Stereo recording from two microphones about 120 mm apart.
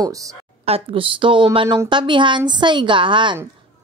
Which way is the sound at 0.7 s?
50° right (ahead or behind).